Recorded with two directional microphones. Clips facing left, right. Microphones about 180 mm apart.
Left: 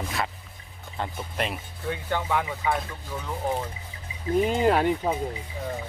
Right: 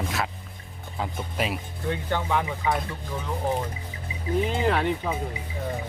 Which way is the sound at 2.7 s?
10° right (ahead or behind).